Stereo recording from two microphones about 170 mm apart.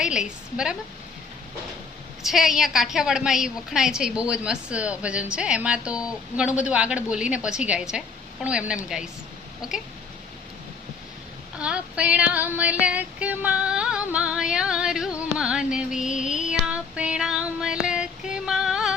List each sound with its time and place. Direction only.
0.0 s a woman's voice: 5° right (ahead or behind)
2.2 s a woman's voice: centre (ahead or behind)
11.6 s female singing: 5° right (ahead or behind)
16.1 s female singing: 45° left (ahead or behind)
16.6 s child singing: 5° right (ahead or behind)